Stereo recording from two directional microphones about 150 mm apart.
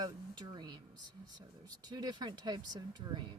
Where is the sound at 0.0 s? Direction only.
30° right (ahead or behind).